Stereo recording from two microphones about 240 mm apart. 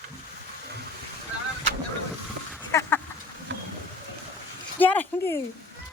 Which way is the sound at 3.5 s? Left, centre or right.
Right.